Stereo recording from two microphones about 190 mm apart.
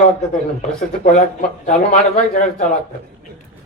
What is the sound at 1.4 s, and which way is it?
A man's voice, 40° left (ahead or behind).